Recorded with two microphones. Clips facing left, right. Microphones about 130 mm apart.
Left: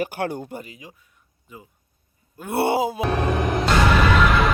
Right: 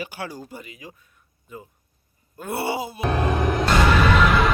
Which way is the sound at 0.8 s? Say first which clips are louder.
Right 2 dB; 15° left (ahead or behind).